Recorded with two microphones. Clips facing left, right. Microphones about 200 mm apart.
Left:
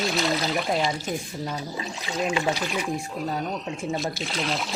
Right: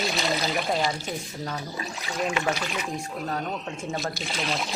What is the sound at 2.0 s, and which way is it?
Speech, 20° left (ahead or behind).